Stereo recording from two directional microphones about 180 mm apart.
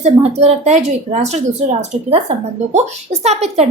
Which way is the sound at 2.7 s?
40° right (ahead or behind).